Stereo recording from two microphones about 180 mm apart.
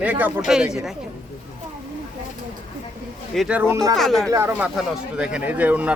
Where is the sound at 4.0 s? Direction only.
Centre (ahead or behind).